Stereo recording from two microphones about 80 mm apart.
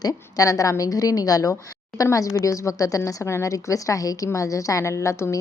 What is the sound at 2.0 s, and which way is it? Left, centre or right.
A woman's voice, left.